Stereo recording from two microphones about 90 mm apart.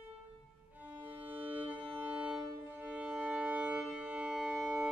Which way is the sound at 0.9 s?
20° right (ahead or behind).